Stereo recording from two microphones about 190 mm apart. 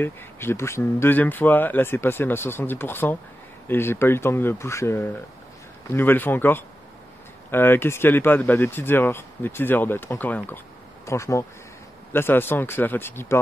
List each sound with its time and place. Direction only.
0.0 s speech: 10° left (ahead or behind)